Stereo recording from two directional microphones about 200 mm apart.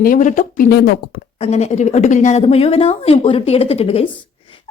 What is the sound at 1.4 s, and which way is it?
Speech, 35° left (ahead or behind).